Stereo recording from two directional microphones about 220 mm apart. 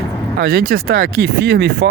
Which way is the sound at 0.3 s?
45° right (ahead or behind).